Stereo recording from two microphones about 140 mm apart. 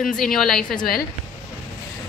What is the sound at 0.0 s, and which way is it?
Speech, centre (ahead or behind).